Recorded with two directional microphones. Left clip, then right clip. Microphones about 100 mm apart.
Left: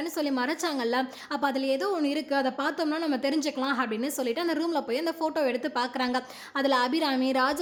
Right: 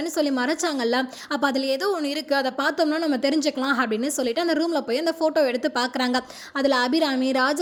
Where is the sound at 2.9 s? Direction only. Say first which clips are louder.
Right 5 dB; 35° right (ahead or behind).